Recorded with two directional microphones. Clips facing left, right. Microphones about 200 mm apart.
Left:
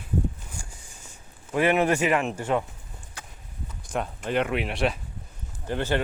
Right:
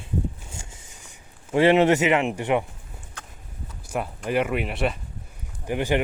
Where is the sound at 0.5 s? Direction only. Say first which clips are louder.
Right 1 dB; 20° right (ahead or behind).